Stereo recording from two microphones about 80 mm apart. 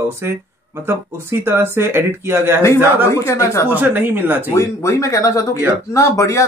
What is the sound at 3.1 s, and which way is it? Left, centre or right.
Speech, left.